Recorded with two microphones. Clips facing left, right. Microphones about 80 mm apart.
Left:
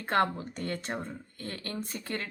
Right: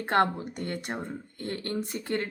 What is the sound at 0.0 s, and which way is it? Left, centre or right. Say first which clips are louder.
Speech: right 3 dB; right.